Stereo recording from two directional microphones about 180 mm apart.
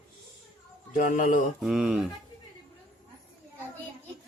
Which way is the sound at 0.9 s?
45° left (ahead or behind).